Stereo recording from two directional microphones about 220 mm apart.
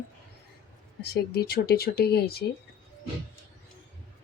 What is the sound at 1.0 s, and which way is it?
Speech, 45° left (ahead or behind).